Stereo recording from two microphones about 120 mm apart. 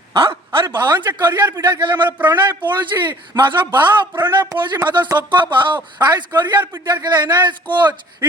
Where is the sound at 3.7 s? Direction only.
15° right (ahead or behind).